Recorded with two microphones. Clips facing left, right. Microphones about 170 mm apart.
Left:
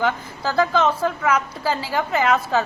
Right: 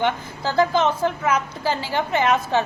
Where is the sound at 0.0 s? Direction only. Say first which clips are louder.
Even; 30° right (ahead or behind).